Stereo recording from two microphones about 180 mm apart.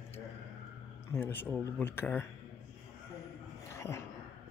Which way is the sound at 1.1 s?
10° left (ahead or behind).